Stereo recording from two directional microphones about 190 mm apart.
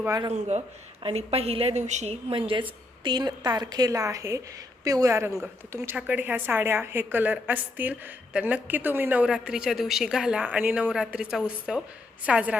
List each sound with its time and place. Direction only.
0.0 s a woman's voice: 15° right (ahead or behind)
0.3 s a woman's voice: 35° right (ahead or behind); by 12.5 s 5° right (ahead or behind)